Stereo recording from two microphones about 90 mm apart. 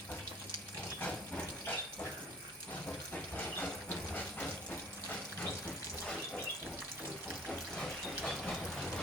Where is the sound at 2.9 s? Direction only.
15° left (ahead or behind).